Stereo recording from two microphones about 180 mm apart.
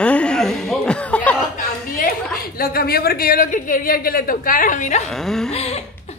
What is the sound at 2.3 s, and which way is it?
Speech, 55° left (ahead or behind).